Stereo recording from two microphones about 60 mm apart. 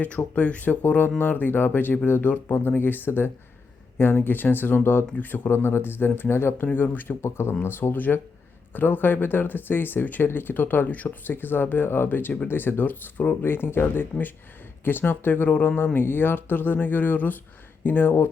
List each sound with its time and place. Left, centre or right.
0.3 s speech: left
6.7 s speech: left
7.2 s speech: left